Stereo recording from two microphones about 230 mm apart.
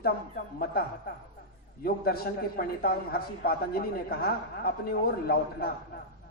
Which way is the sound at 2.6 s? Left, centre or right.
Left.